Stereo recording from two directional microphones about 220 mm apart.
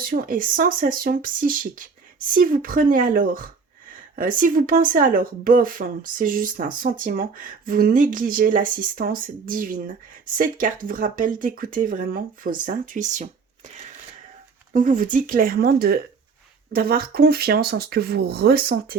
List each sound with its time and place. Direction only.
0.0 s speech: 40° right (ahead or behind)
14.7 s speech: 35° right (ahead or behind)